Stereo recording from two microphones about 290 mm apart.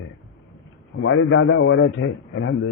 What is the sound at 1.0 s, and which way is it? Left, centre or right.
A man's voice, left.